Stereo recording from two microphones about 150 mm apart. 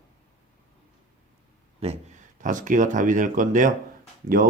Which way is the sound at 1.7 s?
45° right (ahead or behind).